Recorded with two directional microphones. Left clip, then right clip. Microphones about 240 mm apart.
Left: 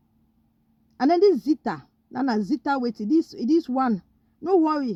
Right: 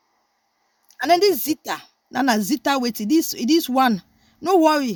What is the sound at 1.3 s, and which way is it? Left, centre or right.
Speech, right.